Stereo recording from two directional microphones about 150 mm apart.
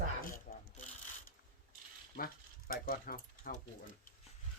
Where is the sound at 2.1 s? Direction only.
80° left.